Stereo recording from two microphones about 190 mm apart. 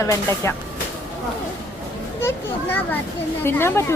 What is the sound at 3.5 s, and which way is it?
Speech, 10° left (ahead or behind).